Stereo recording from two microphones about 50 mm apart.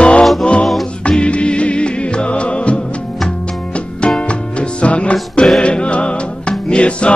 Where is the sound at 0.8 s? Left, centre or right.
Centre.